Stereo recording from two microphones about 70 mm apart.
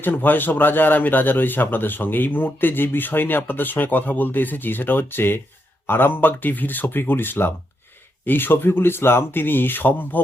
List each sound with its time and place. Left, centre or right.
0.0 s a man's voice: left